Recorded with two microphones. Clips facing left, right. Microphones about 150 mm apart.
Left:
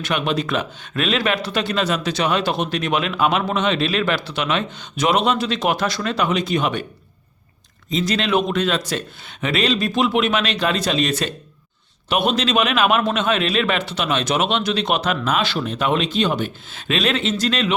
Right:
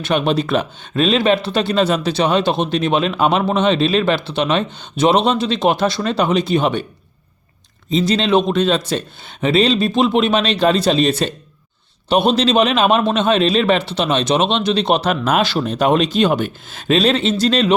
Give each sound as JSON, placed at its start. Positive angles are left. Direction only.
{"t": 0.0, "sound": "speech", "side_deg": -30}
{"t": 7.9, "sound": "a man's voice", "side_deg": -30}